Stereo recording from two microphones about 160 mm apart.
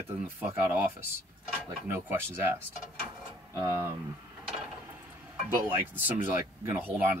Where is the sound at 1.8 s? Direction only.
10° right (ahead or behind).